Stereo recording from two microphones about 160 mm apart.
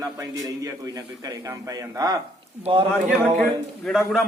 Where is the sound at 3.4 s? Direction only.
Centre (ahead or behind).